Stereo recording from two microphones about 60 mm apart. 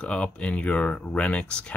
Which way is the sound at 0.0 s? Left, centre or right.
Centre.